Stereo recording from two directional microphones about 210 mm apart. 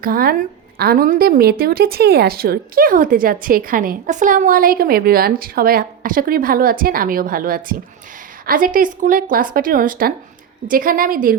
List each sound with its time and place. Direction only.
0.0 s a woman's voice: 45° right (ahead or behind)